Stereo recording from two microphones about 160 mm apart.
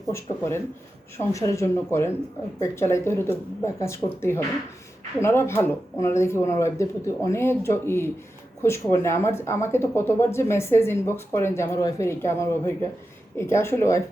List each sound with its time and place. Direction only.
0.1 s speech: 15° left (ahead or behind)